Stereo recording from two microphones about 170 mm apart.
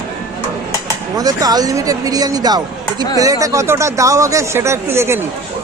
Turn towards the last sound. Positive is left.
turn(degrees=-15)  # may be behind; listen again after turning